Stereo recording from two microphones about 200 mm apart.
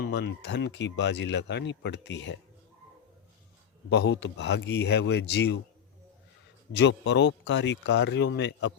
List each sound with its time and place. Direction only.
0.1 s speech: 55° left (ahead or behind)
3.8 s speech: 55° left (ahead or behind)
6.7 s speech: 60° left (ahead or behind)